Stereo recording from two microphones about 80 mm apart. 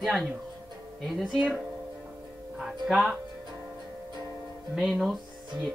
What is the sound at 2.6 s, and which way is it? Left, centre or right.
Speech, centre.